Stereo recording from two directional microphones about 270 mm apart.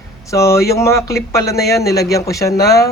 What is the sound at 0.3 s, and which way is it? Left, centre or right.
Speech, centre.